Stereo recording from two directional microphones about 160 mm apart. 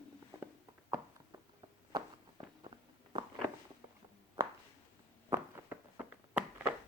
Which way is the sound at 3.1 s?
25° right (ahead or behind).